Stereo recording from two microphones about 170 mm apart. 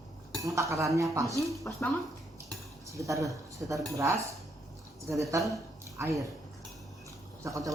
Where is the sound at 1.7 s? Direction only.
5° left (ahead or behind).